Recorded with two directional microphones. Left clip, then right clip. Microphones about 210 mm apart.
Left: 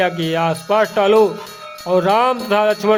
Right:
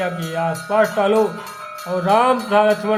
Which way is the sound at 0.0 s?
50° left (ahead or behind).